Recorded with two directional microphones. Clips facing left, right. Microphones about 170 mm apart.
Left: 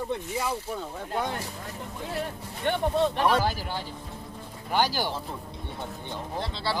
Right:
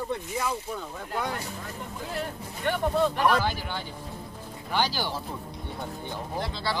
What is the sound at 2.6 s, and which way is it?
Speech, 25° left (ahead or behind).